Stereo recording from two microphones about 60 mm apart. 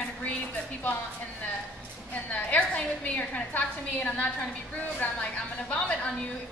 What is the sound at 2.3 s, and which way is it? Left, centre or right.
A woman's voice, left.